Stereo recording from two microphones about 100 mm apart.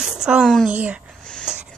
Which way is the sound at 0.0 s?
5° right (ahead or behind).